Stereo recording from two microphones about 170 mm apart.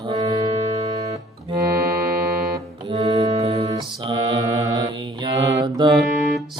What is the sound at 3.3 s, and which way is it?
Music, 35° right (ahead or behind).